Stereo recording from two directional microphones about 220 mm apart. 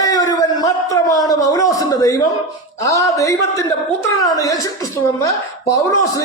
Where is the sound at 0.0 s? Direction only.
15° left (ahead or behind).